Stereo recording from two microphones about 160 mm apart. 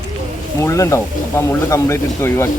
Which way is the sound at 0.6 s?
20° left (ahead or behind).